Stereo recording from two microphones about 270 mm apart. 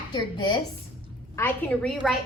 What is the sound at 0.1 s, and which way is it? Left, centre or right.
A woman's voice, centre.